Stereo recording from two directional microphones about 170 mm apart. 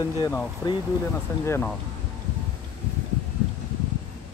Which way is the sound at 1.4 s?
15° left (ahead or behind).